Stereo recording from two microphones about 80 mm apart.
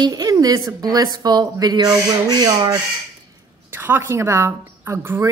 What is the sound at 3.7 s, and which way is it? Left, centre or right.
Speech, right.